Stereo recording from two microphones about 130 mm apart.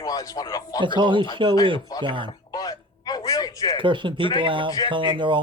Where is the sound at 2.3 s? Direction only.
30° left (ahead or behind).